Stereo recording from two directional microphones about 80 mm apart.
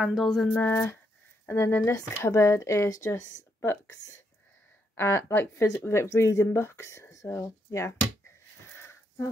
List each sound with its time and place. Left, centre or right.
0.0 s a sound: centre
0.5 s a woman's voice: left
4.9 s a woman's voice: left
8.7 s sniff: left